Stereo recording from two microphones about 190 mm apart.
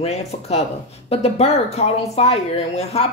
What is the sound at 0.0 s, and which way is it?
Speech, 35° left (ahead or behind).